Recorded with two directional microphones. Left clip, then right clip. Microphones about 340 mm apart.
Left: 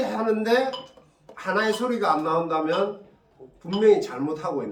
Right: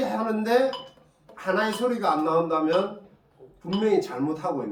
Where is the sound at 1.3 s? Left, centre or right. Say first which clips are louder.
Left 1 dB; centre.